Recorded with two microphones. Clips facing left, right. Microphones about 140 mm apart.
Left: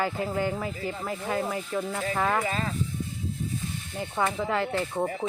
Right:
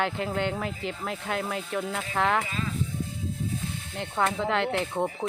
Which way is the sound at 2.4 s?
50° left (ahead or behind).